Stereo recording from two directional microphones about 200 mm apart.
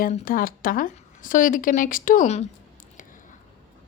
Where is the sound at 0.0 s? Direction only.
40° left (ahead or behind).